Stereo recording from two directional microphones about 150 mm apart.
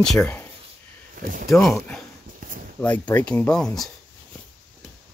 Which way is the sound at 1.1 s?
65° right (ahead or behind).